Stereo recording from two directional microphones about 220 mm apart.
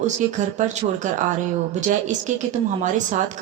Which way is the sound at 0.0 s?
35° right (ahead or behind).